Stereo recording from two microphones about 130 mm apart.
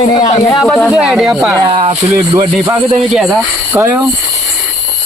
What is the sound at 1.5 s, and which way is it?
Speech, 30° right (ahead or behind).